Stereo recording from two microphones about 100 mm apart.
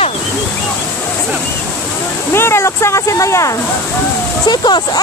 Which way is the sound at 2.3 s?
25° left (ahead or behind).